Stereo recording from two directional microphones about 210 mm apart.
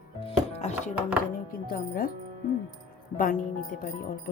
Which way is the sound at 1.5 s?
45° left (ahead or behind).